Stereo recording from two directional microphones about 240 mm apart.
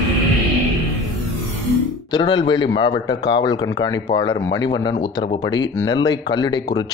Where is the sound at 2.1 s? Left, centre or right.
Left.